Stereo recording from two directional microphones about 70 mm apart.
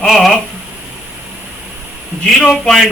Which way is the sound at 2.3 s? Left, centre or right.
Centre.